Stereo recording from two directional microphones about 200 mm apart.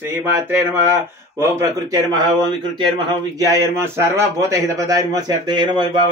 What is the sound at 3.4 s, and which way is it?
A man's voice, 15° right (ahead or behind).